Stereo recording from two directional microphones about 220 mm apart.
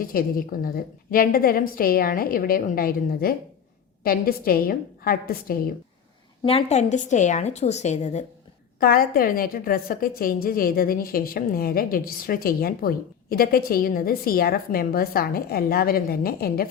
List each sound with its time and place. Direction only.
0.0 s a woman's voice: 40° left (ahead or behind)
6.4 s a woman's voice: 25° left (ahead or behind)
8.8 s a woman's voice: 40° left (ahead or behind)